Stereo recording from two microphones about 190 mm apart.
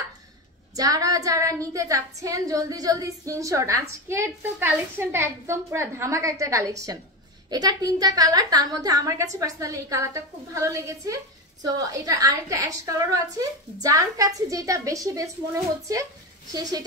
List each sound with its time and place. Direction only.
0.7 s a woman's voice: 20° right (ahead or behind)